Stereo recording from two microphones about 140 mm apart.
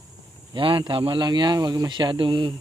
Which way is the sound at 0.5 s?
35° right (ahead or behind).